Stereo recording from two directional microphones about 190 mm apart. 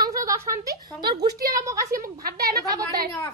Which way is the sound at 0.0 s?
15° right (ahead or behind).